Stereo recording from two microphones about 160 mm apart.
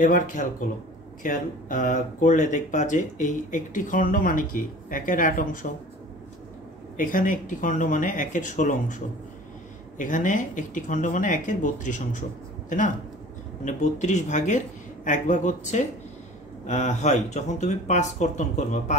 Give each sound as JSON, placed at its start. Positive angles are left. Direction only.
{"t": 0.0, "sound": "speech", "side_deg": 55}
{"t": 7.0, "sound": "speech", "side_deg": 55}
{"t": 9.9, "sound": "speech", "side_deg": 55}